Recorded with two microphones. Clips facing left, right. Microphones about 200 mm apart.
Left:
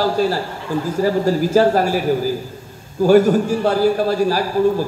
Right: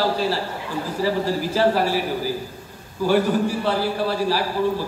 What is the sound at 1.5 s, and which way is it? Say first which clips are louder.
Speech: left 5 dB; 45° left (ahead or behind).